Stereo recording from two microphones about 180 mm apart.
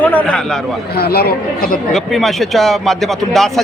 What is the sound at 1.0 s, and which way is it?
Speech, 60° left (ahead or behind).